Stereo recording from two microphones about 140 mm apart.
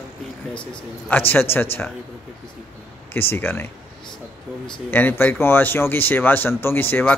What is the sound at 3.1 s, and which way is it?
Speech, 15° left (ahead or behind).